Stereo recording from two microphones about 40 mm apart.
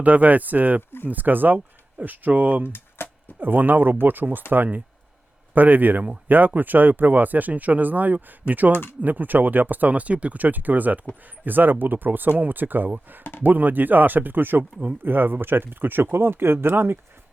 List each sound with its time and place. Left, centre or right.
0.0 s speech: right
2.6 s a sound: left
3.4 s speech: right